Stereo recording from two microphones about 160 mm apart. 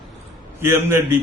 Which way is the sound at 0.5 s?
15° right (ahead or behind).